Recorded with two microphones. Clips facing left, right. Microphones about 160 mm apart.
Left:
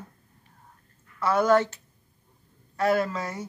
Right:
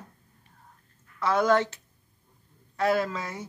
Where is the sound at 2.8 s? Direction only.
Centre (ahead or behind).